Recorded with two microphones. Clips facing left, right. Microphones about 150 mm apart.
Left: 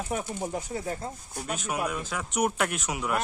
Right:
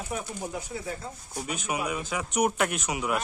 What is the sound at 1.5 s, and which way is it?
Speech, centre (ahead or behind).